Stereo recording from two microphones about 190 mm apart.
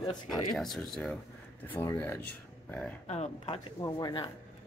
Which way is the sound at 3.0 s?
35° left (ahead or behind).